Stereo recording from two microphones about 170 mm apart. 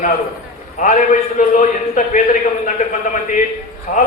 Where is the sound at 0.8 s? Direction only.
50° left (ahead or behind).